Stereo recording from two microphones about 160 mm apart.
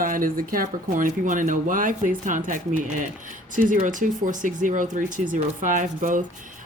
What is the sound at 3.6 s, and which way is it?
Speech, 55° right (ahead or behind).